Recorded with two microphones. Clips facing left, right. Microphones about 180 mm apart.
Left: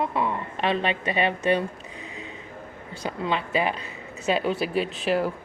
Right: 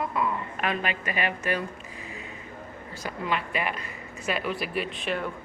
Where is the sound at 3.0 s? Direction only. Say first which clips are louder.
Left 3 dB; 25° left (ahead or behind).